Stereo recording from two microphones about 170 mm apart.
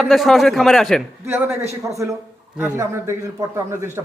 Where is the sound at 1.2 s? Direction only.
15° right (ahead or behind).